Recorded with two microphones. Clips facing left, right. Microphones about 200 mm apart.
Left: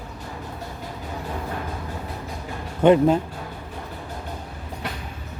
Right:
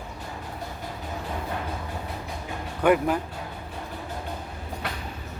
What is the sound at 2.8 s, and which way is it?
Speech, 25° left (ahead or behind).